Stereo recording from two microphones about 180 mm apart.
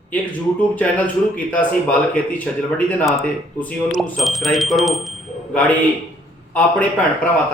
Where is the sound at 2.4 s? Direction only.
5° left (ahead or behind).